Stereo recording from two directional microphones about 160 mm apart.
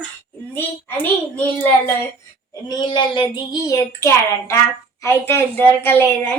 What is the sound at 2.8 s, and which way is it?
A woman's voice, 30° left (ahead or behind).